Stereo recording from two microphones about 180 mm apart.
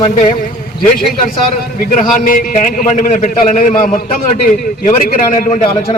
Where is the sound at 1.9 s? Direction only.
45° left (ahead or behind).